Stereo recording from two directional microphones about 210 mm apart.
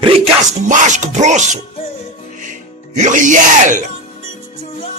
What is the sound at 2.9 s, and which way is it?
Music, 35° right (ahead or behind).